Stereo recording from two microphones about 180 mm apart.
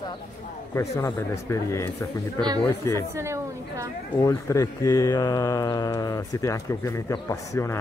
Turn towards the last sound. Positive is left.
turn(degrees=15)  # may be behind; listen again after turning